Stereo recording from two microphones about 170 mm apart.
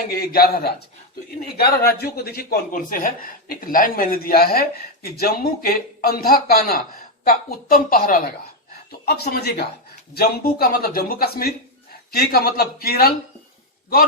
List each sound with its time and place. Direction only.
0.1 s a man's voice: 60° left (ahead or behind)
8.9 s a man's voice: 70° left (ahead or behind)